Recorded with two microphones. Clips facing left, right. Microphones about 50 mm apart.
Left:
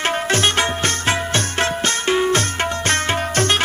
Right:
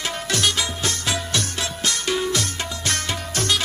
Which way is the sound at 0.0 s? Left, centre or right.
Left.